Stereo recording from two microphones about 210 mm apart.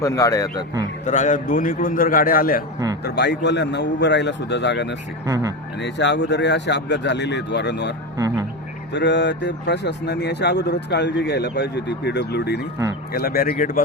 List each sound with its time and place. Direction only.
0.0 s a man's voice: 15° left (ahead or behind)
1.0 s a man's voice: 35° left (ahead or behind); by 4.9 s 55° left (ahead or behind)
5.2 s speech: 15° right (ahead or behind)
5.8 s speech: 60° left (ahead or behind); by 13.8 s 40° left (ahead or behind)